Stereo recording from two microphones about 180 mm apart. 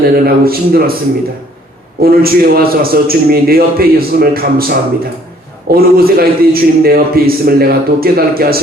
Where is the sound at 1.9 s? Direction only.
55° right (ahead or behind).